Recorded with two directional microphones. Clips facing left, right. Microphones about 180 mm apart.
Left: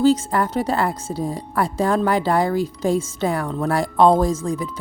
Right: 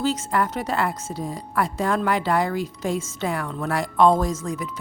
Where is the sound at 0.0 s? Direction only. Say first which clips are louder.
Left 6 dB; 35° left (ahead or behind).